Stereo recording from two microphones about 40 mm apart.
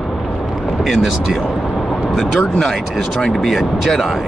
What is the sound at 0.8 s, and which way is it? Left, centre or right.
Speech, centre.